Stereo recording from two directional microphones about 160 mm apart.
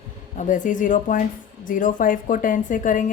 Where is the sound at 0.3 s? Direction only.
50° left (ahead or behind).